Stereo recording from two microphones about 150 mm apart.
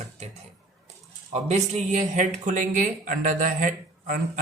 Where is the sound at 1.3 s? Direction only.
50° right (ahead or behind).